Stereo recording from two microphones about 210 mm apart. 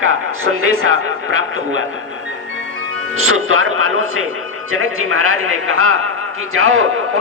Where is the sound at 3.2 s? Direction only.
80° right.